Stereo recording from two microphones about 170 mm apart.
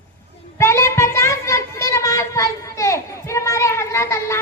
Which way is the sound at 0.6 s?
15° left (ahead or behind).